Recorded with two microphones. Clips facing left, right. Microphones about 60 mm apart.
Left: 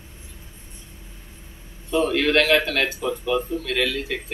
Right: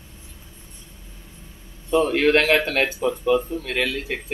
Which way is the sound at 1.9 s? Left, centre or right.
Right.